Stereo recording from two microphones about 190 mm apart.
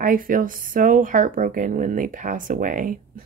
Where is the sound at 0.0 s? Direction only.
45° right (ahead or behind).